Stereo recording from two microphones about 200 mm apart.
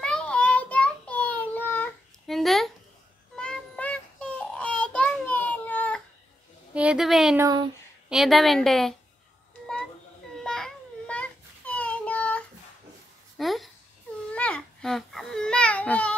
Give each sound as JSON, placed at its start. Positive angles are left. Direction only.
{"t": 0.0, "sound": "child singing", "side_deg": 5}
{"t": 6.7, "sound": "a woman's voice", "side_deg": -5}
{"t": 7.3, "sound": "speech", "side_deg": -20}
{"t": 8.1, "sound": "a woman's voice", "side_deg": 0}
{"t": 10.3, "sound": "a sound", "side_deg": 5}
{"t": 14.3, "sound": "babbling", "side_deg": 5}